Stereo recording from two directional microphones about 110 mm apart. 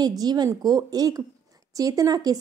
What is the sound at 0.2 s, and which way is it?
Speech, 40° right (ahead or behind).